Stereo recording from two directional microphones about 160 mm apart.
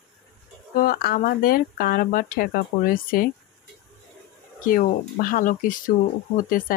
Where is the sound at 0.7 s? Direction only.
65° left (ahead or behind).